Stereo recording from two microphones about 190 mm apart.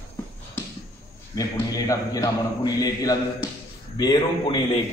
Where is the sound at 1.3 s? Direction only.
20° left (ahead or behind).